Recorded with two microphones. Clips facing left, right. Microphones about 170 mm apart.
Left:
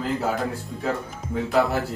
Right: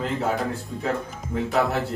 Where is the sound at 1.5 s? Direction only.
Centre (ahead or behind).